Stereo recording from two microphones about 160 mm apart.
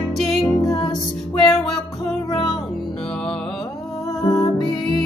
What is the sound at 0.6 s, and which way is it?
Music, 25° left (ahead or behind).